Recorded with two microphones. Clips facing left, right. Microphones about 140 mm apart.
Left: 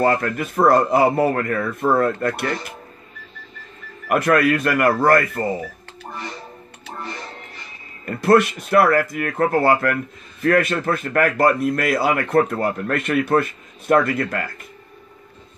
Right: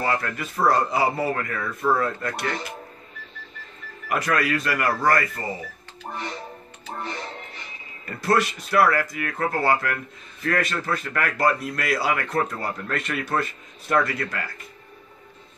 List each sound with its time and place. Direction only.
0.0 s speech: 50° left (ahead or behind)
4.1 s speech: 55° left (ahead or behind)
8.0 s speech: 55° left (ahead or behind)